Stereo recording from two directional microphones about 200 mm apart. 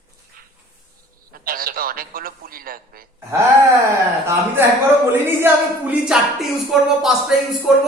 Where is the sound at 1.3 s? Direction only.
45° right (ahead or behind).